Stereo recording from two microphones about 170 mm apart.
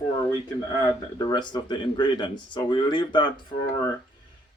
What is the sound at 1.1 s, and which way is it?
Speech, 25° left (ahead or behind).